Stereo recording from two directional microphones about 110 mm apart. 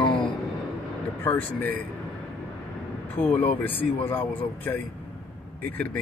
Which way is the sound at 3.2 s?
15° left (ahead or behind).